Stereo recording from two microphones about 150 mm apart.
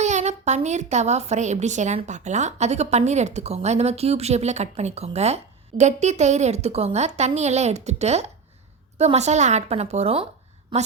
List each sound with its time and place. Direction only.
0.0 s a woman's voice: 50° right (ahead or behind)
10.7 s a woman's voice: 35° right (ahead or behind)